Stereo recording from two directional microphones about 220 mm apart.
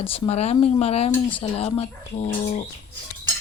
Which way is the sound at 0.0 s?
30° left (ahead or behind).